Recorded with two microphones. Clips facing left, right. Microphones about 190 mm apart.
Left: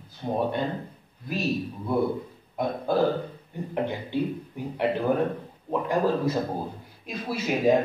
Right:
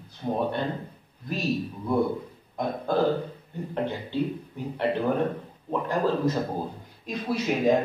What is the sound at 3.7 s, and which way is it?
A man's voice, 15° left (ahead or behind).